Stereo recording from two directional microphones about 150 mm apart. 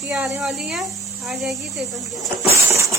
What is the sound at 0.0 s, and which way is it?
Speech, centre (ahead or behind).